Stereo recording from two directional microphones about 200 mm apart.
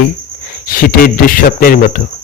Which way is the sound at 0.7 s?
45° left (ahead or behind).